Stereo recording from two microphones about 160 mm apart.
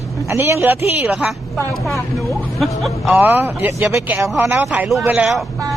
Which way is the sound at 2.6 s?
Centre (ahead or behind).